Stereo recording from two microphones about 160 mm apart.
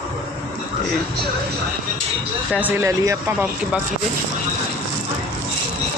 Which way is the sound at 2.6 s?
15° right (ahead or behind).